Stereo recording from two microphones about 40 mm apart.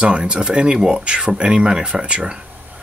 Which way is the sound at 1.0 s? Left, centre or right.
Right.